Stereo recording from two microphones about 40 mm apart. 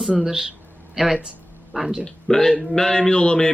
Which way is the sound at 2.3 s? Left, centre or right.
Centre.